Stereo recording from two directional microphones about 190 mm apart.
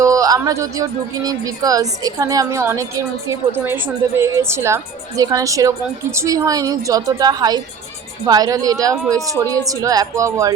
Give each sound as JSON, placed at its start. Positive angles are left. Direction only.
{"t": 0.0, "sound": "speech", "side_deg": -20}